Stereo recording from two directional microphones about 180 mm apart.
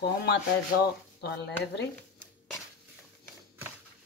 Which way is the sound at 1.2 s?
70° left (ahead or behind).